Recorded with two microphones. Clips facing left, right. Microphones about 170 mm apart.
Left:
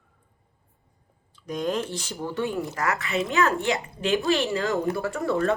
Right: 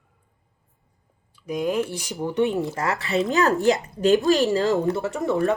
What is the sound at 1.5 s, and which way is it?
Speech, 15° right (ahead or behind).